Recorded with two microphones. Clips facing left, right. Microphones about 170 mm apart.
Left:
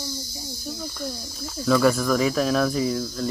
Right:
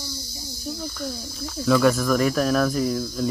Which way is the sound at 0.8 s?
Centre (ahead or behind).